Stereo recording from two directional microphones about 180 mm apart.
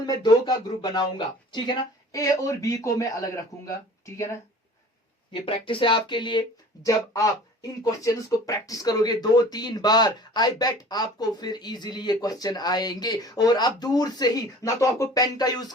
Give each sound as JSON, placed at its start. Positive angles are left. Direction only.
{"t": 0.0, "sound": "a man's voice", "side_deg": 20}
{"t": 5.3, "sound": "a man's voice", "side_deg": 30}